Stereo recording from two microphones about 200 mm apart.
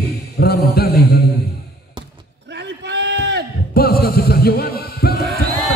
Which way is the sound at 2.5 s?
60° right (ahead or behind).